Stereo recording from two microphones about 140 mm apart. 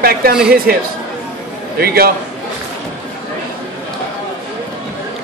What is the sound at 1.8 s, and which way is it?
Speech, 90° right.